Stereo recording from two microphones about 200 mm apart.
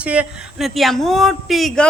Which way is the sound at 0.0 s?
5° right (ahead or behind).